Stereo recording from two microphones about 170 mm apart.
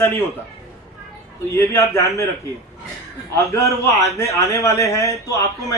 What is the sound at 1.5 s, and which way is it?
Speech, 15° left (ahead or behind).